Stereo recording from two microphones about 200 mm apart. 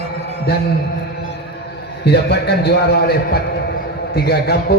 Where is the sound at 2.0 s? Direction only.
55° left (ahead or behind).